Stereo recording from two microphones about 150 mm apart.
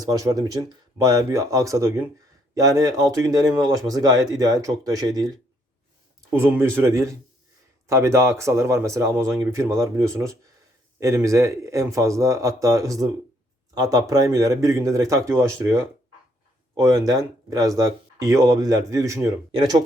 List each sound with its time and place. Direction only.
0.0 s a man's voice: 25° right (ahead or behind)
6.3 s a man's voice: 15° right (ahead or behind)
17.1 s a man's voice: 25° right (ahead or behind)
19.5 s speech: 30° right (ahead or behind)